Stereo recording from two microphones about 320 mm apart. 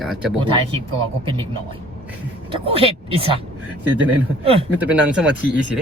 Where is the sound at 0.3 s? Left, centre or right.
Centre.